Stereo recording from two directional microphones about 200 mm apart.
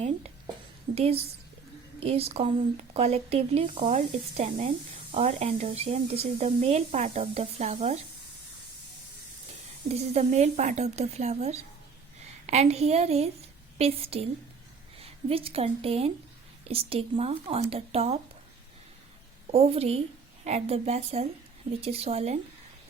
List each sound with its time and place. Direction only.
0.9 s speech: 30° right (ahead or behind)
9.9 s a woman's voice: 35° right (ahead or behind)
19.5 s speech: 30° right (ahead or behind)